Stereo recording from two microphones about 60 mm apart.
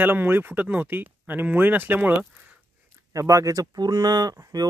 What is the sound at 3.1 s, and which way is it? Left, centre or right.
Speech, right.